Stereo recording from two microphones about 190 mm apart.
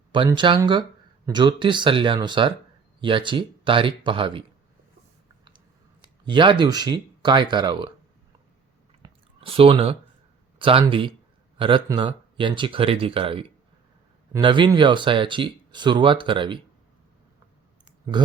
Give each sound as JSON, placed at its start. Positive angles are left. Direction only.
{"t": 0.1, "sound": "speech", "side_deg": -25}
{"t": 6.2, "sound": "speech", "side_deg": -25}
{"t": 9.0, "sound": "chewing", "side_deg": -30}
{"t": 10.6, "sound": "speech", "side_deg": -30}